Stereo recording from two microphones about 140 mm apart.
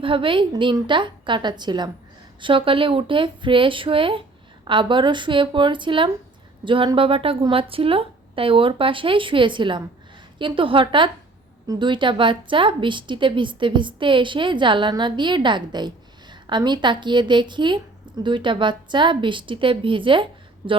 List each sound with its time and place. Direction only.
0.0 s a woman's voice: 40° right (ahead or behind)